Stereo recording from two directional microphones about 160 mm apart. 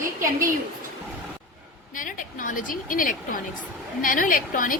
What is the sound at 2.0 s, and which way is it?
A woman's voice, 60° left (ahead or behind).